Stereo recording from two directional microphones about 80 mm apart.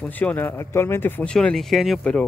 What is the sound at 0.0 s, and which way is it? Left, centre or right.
Speech, centre.